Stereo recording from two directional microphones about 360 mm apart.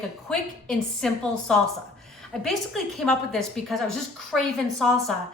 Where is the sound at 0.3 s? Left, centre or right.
Centre.